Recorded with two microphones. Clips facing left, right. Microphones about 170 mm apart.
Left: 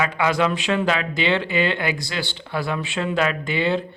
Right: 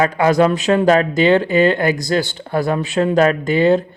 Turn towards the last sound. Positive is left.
turn(degrees=-45)  # may be behind; listen again after turning